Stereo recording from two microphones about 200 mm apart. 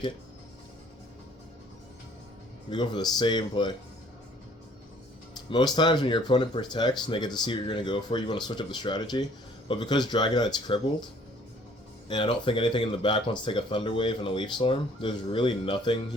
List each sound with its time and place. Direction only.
2.6 s speech: 20° left (ahead or behind)
5.5 s speech: 20° left (ahead or behind)